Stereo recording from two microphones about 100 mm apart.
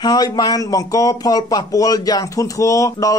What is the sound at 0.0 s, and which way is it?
Speech, 40° left (ahead or behind).